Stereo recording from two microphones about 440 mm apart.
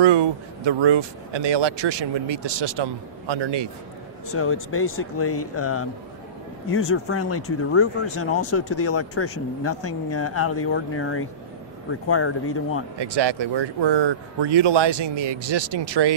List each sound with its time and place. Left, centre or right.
0.0 s speech: right
4.3 s speech: left
13.0 s speech: right